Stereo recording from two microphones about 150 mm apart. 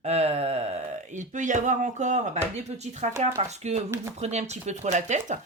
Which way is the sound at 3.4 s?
45° right (ahead or behind).